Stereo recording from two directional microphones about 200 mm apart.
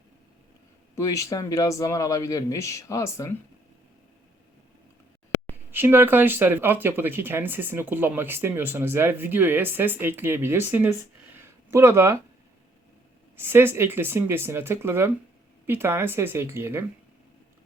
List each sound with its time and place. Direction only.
0.9 s speech: 15° left (ahead or behind)
5.7 s speech: 10° right (ahead or behind)
11.3 s a sound: 15° right (ahead or behind)
13.3 s speech: 10° right (ahead or behind)